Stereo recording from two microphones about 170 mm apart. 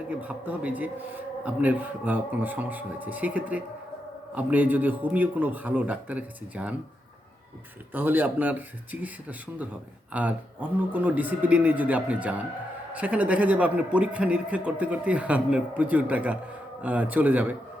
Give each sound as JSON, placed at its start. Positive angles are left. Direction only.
{"t": 0.1, "sound": "a man's voice", "side_deg": -10}
{"t": 7.9, "sound": "a man's voice", "side_deg": -10}